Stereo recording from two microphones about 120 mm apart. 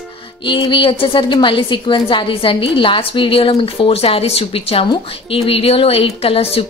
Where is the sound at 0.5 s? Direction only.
40° left (ahead or behind).